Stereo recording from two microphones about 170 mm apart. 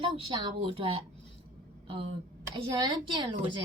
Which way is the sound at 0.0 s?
30° right (ahead or behind).